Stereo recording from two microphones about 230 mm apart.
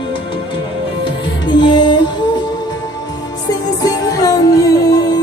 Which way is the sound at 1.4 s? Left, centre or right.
Centre.